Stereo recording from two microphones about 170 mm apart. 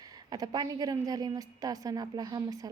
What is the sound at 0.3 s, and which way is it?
A woman's voice, 25° right (ahead or behind).